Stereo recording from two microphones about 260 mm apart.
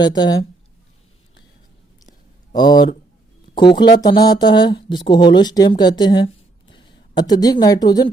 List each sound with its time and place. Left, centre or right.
0.0 s speech: centre
2.5 s speech: centre